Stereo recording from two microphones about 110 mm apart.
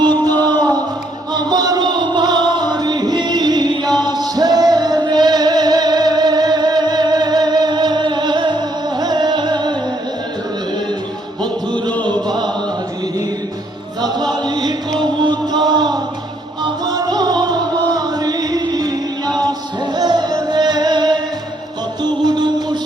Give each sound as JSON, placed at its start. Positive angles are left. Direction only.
{"t": 0.3, "sound": "music", "side_deg": -40}
{"t": 14.0, "sound": "music", "side_deg": -40}